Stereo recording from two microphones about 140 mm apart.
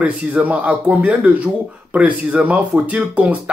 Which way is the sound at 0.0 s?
10° right (ahead or behind).